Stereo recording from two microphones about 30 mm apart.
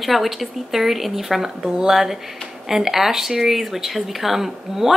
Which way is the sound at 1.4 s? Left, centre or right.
Right.